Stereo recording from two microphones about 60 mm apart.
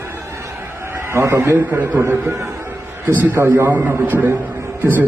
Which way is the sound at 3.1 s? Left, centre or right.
Right.